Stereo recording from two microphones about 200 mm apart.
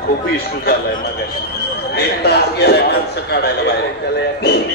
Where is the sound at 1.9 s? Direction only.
55° left (ahead or behind).